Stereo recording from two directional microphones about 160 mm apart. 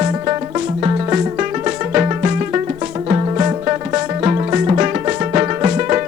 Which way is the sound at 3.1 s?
25° right (ahead or behind).